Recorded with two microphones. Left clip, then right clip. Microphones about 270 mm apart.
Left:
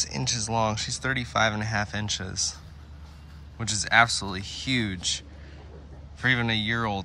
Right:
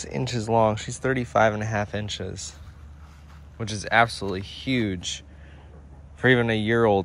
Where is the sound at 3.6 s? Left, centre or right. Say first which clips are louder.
Even; centre.